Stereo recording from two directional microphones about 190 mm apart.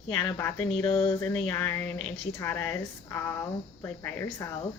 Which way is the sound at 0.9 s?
25° left (ahead or behind).